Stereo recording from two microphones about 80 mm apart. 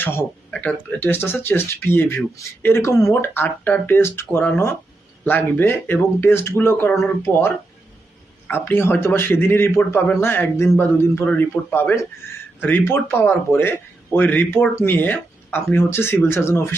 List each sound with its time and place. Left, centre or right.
0.0 s speech: left
0.5 s speech: centre; by 3.2 s left
3.2 s speech: left